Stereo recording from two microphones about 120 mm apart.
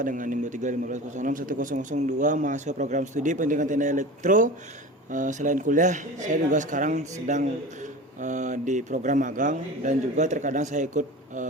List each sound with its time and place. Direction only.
0.0 s speech: 90° right